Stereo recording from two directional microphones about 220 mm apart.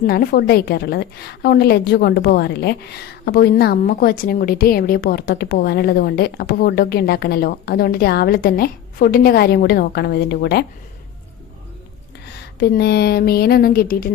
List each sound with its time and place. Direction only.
0.1 s a woman's voice: 45° left (ahead or behind)
12.4 s a woman's voice: 50° left (ahead or behind)